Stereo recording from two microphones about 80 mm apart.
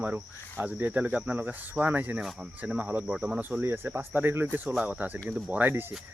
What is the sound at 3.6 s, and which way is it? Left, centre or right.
Speech, right.